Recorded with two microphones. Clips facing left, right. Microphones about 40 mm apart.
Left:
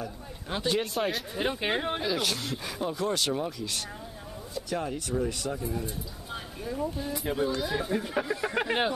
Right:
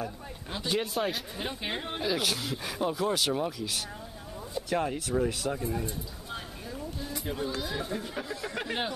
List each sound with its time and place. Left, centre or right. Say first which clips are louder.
0.6 s speech: left 2 dB; centre
1.4 s speech: left 8 dB; centre
2.0 s speech: even; centre
5.9 s a sound: even; centre
7.0 s speech: left 2 dB; centre